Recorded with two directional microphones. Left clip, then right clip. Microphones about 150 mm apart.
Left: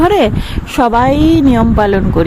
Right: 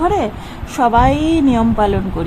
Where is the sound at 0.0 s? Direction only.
45° left (ahead or behind).